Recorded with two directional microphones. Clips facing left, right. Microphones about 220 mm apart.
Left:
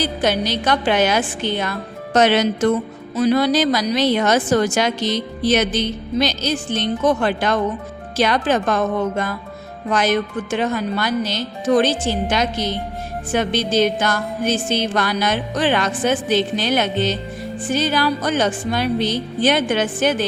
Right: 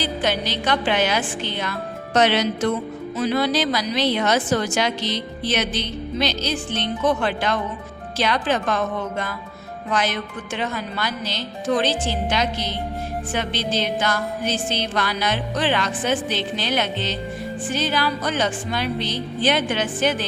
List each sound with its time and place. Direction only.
0.0 s a woman's voice: 45° left (ahead or behind)